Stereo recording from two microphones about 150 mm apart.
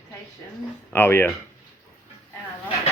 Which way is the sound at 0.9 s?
15° left (ahead or behind).